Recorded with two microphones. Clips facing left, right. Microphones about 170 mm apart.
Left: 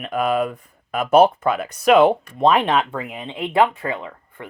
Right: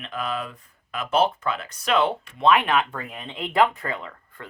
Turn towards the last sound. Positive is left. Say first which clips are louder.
# left 5 dB
turn(degrees=20)  # may be behind; listen again after turning